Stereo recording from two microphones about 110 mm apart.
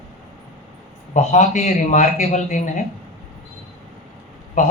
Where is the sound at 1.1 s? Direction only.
90° left.